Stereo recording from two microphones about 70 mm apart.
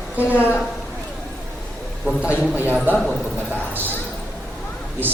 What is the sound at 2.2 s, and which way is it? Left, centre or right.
Speech, centre.